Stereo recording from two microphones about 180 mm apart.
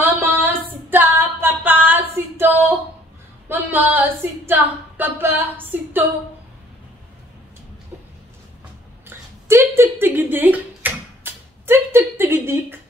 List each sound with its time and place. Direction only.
0.0 s female singing: 10° right (ahead or behind)
3.4 s speech: 10° right (ahead or behind)
9.0 s a sound: 15° right (ahead or behind)